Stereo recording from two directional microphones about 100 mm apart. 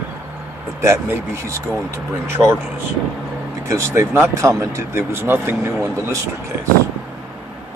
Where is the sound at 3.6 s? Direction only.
30° right (ahead or behind).